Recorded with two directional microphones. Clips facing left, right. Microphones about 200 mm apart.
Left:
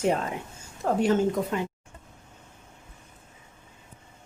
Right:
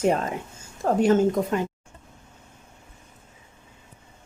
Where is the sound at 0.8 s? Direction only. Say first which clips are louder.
Right 4 dB; 45° right (ahead or behind).